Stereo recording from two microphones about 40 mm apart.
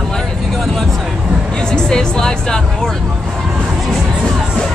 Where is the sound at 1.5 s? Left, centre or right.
Centre.